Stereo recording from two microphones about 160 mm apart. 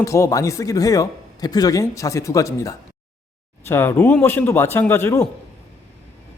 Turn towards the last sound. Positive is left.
turn(degrees=15)  # may be behind; listen again after turning